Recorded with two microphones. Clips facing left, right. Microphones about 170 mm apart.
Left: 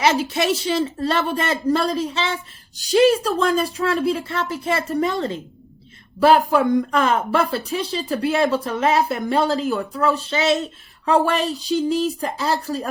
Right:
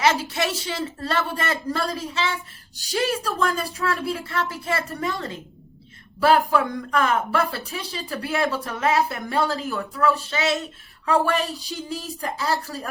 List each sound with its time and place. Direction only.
0.0 s speech: 20° left (ahead or behind)